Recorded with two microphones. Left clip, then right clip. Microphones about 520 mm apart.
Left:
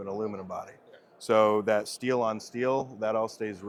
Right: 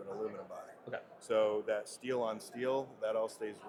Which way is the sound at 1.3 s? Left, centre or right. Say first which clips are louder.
Left 9 dB; left.